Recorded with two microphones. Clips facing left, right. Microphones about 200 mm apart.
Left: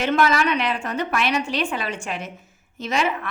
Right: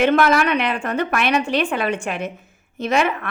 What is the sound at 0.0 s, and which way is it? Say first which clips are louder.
A woman's voice: right 4 dB; 55° right (ahead or behind).